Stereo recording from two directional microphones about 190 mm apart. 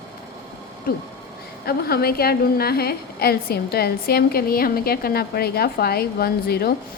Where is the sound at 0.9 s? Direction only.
50° left (ahead or behind).